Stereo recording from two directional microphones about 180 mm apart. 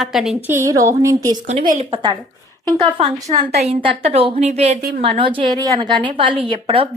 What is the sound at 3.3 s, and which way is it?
A woman's voice, 30° right (ahead or behind).